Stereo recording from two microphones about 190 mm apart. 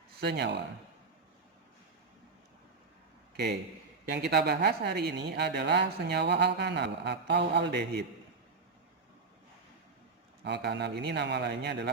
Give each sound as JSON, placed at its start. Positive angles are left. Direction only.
{"t": 0.2, "sound": "speech", "side_deg": -60}
{"t": 3.3, "sound": "a man's voice", "side_deg": -60}
{"t": 10.4, "sound": "speech", "side_deg": -65}